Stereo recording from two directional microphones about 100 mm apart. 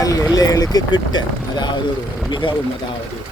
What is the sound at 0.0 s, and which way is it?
Speech, 35° left (ahead or behind).